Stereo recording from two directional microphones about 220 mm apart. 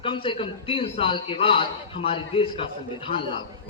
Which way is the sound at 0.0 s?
25° left (ahead or behind).